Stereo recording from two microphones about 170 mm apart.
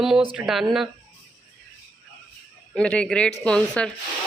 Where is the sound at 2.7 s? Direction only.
5° left (ahead or behind).